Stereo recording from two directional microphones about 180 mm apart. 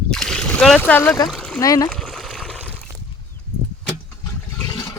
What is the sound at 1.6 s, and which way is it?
Speech, 20° left (ahead or behind).